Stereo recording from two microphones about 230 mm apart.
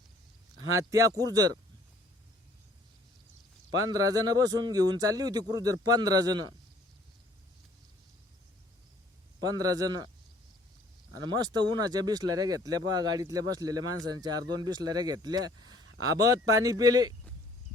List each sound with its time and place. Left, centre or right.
0.8 s speech: centre
3.8 s speech: centre
9.4 s speech: centre
11.1 s speech: centre